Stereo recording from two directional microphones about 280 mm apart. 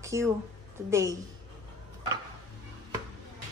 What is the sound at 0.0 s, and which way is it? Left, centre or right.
A woman's voice, centre.